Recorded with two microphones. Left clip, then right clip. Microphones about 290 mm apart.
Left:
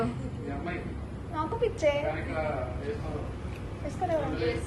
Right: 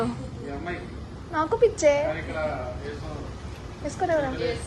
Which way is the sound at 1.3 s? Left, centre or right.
Right.